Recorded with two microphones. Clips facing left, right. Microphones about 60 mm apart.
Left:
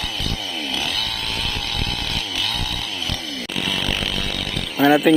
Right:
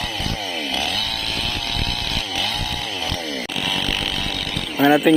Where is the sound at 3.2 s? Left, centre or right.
Right.